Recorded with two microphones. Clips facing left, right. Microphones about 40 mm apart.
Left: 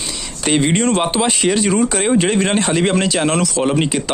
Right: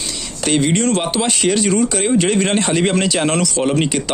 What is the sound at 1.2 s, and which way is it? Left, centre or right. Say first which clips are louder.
Speech: left 1 dB; centre.